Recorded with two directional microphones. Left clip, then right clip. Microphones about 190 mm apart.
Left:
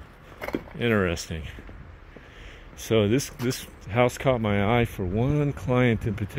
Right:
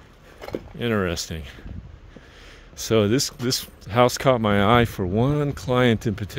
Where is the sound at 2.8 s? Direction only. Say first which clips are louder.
Right 3 dB; 25° right (ahead or behind).